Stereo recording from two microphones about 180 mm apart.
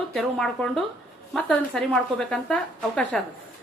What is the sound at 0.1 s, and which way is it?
A woman's voice, 5° left (ahead or behind).